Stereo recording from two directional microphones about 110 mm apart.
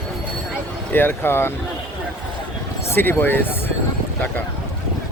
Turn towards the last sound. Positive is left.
turn(degrees=20)  # may be behind; listen again after turning